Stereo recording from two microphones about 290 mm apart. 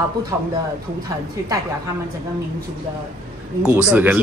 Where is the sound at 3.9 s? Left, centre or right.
Centre.